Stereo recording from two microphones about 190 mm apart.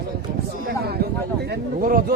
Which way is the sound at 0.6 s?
55° right (ahead or behind).